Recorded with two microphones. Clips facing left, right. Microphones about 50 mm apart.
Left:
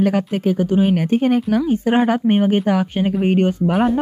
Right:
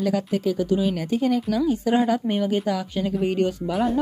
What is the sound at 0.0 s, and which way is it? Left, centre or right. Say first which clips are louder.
Speech: left 5 dB; left.